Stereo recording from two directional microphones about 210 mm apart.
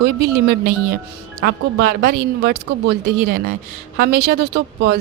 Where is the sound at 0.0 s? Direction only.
50° right (ahead or behind).